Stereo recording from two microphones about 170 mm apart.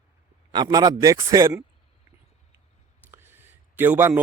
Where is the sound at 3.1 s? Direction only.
10° right (ahead or behind).